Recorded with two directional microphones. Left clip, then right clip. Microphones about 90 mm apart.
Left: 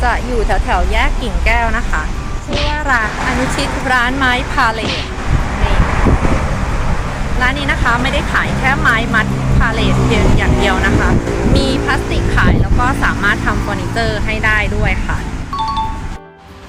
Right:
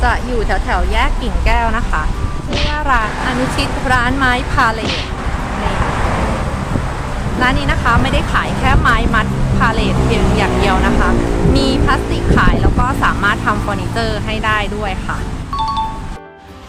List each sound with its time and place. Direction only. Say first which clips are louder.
0.0 s speech: even; 20° right (ahead or behind)
2.5 s speech: left 1 dB; centre (ahead or behind)
2.8 s speech: even; 25° right (ahead or behind)
7.4 s speech: even; 30° right (ahead or behind)
15.5 s music: even; centre (ahead or behind)